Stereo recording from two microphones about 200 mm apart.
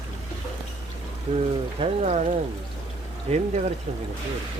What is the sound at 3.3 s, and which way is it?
Speech, 35° right (ahead or behind).